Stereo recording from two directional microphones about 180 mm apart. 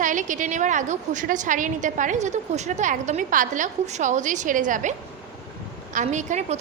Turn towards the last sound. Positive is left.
turn(degrees=-40)  # may be behind; listen again after turning